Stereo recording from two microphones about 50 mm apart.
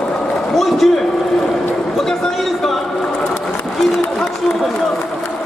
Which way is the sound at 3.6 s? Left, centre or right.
Centre.